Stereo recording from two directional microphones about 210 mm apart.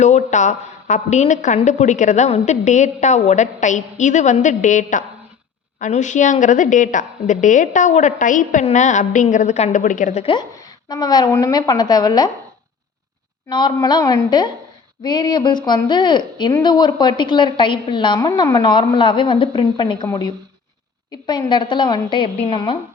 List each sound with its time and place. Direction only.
0.0 s a woman's voice: 35° left (ahead or behind); by 12.3 s 20° left (ahead or behind)
13.5 s speech: 20° left (ahead or behind)